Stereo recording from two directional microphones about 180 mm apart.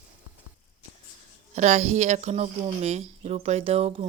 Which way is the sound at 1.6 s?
40° right (ahead or behind).